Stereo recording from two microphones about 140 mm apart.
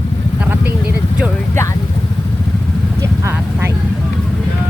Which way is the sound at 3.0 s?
20° right (ahead or behind).